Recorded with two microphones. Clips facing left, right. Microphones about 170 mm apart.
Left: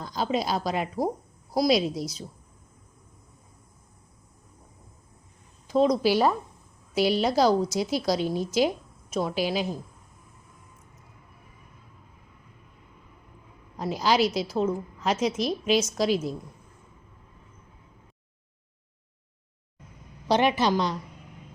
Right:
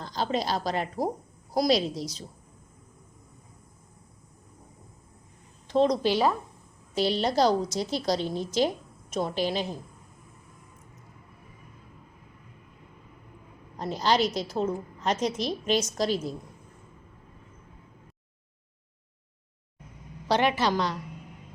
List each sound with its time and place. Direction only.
0.0 s a woman's voice: 5° left (ahead or behind)
2.0 s a woman's voice: 40° right (ahead or behind)
5.6 s a woman's voice: 5° left (ahead or behind)
13.7 s a woman's voice: 5° left (ahead or behind)
20.2 s a woman's voice: 15° left (ahead or behind)